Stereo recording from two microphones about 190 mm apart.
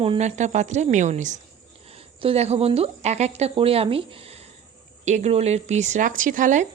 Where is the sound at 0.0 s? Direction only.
35° right (ahead or behind).